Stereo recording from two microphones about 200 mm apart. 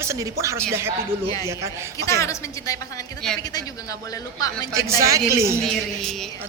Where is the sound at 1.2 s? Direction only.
20° left (ahead or behind).